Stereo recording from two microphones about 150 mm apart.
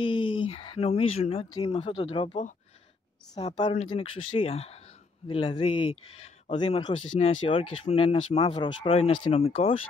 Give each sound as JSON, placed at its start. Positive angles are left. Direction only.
{"t": 0.0, "sound": "speech", "side_deg": 35}
{"t": 3.4, "sound": "speech", "side_deg": 35}